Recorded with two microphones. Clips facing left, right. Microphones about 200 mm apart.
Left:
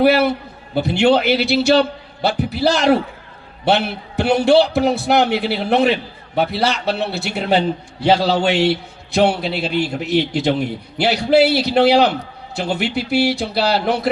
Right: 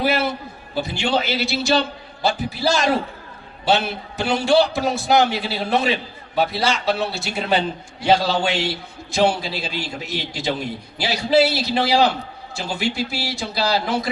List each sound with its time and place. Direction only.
0.0 s a man's voice: 60° left (ahead or behind)